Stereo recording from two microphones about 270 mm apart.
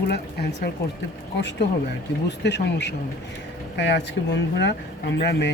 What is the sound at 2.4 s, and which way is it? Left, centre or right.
Speech, left.